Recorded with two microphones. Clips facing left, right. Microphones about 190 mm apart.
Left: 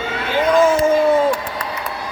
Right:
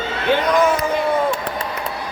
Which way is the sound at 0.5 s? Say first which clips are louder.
Left 5 dB; 25° left (ahead or behind).